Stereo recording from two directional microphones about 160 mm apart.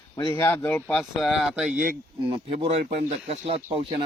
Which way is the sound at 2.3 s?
40° right (ahead or behind).